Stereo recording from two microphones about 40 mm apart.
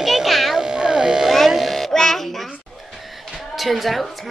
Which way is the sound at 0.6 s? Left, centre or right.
Centre.